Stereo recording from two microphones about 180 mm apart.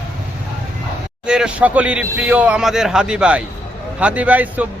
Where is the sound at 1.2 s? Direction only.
5° right (ahead or behind).